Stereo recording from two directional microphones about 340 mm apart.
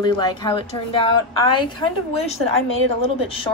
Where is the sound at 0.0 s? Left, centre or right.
Centre.